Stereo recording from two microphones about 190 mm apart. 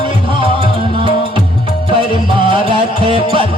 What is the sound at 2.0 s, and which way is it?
Music, 25° right (ahead or behind).